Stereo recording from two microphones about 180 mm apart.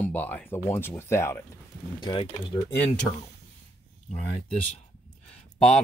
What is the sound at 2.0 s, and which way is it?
Speech, 30° left (ahead or behind).